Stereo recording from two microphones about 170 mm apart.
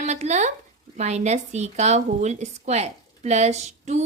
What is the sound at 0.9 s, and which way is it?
Speech, 40° right (ahead or behind).